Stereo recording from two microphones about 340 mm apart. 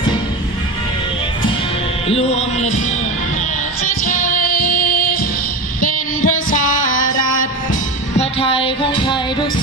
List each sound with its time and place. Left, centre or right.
2.0 s music: centre
3.8 s music: left
6.2 s music: left
8.2 s music: centre